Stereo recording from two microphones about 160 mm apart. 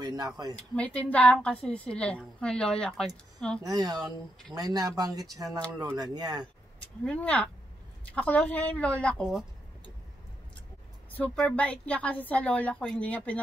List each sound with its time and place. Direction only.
0.0 s a sound: 25° right (ahead or behind)
0.6 s a woman's voice: 10° left (ahead or behind)
3.6 s speech: 25° right (ahead or behind)
7.1 s a woman's voice: 10° left (ahead or behind)
11.1 s a woman's voice: 10° left (ahead or behind)